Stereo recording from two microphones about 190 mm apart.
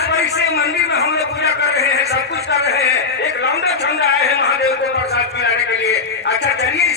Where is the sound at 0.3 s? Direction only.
60° left (ahead or behind).